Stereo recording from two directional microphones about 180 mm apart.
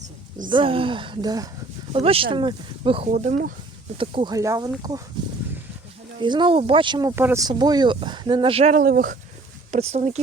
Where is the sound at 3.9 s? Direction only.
25° right (ahead or behind).